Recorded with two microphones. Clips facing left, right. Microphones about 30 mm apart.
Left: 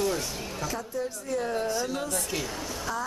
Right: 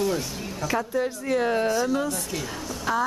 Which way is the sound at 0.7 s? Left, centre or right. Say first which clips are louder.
Right 7 dB; right.